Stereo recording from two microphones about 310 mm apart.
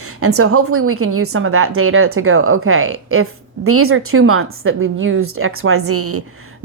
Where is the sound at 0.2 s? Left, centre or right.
Right.